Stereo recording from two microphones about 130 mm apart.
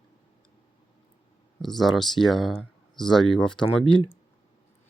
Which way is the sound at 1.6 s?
Centre (ahead or behind).